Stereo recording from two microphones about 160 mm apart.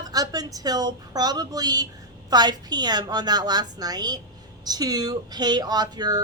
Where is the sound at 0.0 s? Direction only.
25° right (ahead or behind).